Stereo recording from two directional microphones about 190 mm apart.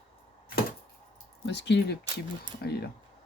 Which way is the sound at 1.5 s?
65° left (ahead or behind).